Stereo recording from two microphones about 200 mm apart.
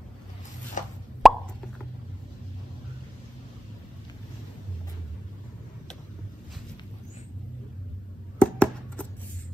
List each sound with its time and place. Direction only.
0.8 s plop: 40° left (ahead or behind)
1.2 s plop: centre (ahead or behind)
8.4 s a sound: 5° left (ahead or behind)